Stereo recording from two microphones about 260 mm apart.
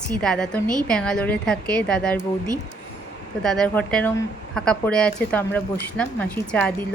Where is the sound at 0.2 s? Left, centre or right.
Centre.